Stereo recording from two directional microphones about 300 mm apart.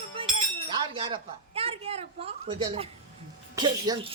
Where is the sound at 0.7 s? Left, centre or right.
Centre.